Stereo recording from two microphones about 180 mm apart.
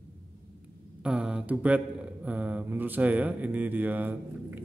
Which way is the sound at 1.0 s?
5° right (ahead or behind).